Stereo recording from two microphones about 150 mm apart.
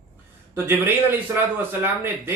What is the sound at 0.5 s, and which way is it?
Speech, 15° right (ahead or behind).